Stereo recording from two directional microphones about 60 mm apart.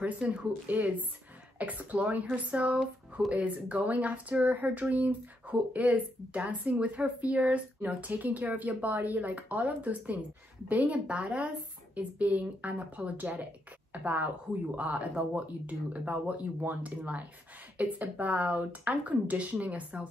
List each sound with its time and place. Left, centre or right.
0.0 s speech: centre